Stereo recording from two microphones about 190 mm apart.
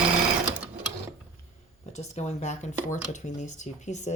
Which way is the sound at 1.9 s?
35° left (ahead or behind).